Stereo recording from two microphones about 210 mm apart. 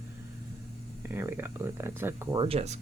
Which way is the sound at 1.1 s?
10° right (ahead or behind).